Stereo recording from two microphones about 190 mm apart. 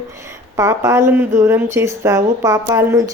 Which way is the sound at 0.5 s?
15° right (ahead or behind).